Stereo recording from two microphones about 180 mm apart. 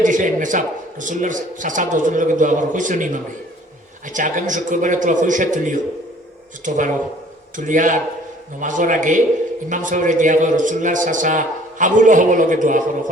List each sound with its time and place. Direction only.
0.0 s a man's voice: 45° right (ahead or behind)